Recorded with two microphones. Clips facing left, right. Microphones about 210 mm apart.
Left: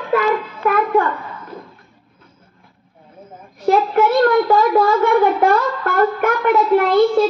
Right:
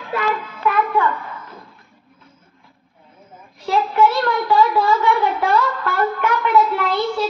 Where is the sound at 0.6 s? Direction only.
45° left (ahead or behind).